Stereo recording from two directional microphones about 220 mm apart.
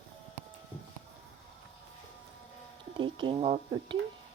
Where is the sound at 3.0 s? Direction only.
20° right (ahead or behind).